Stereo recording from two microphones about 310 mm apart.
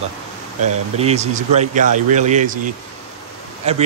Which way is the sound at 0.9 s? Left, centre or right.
Right.